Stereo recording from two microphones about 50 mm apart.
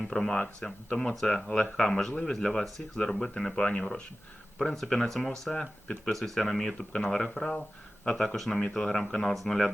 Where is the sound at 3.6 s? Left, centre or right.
Left.